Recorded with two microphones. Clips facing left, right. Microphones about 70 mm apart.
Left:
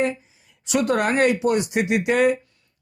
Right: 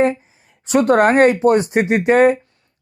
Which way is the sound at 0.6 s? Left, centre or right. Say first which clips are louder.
Right 8 dB; right.